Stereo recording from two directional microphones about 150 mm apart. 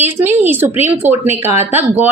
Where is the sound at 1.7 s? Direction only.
15° right (ahead or behind).